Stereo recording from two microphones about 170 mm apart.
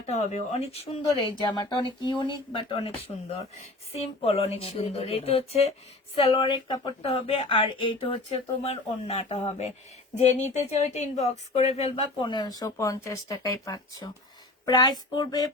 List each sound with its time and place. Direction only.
0.0 s speech: 40° left (ahead or behind)
1.2 s speech: 25° left (ahead or behind)